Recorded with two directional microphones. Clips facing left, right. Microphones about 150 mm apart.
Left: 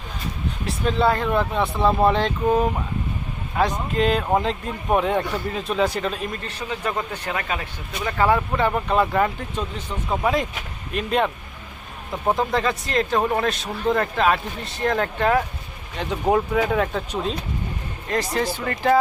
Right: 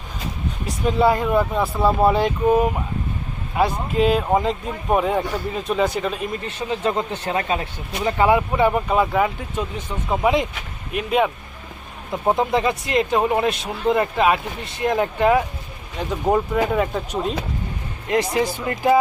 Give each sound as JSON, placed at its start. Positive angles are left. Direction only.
{"t": 0.9, "sound": "speech", "side_deg": -10}
{"t": 6.4, "sound": "speech", "side_deg": -25}
{"t": 8.3, "sound": "speech", "side_deg": -10}
{"t": 12.1, "sound": "speech", "side_deg": -20}
{"t": 16.0, "sound": "speech", "side_deg": 0}
{"t": 18.1, "sound": "speech", "side_deg": -20}